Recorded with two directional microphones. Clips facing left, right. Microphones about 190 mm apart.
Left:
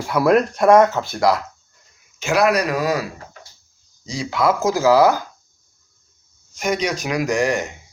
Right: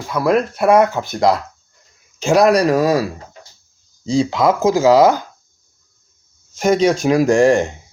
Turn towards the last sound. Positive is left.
turn(degrees=-30)  # may be behind; listen again after turning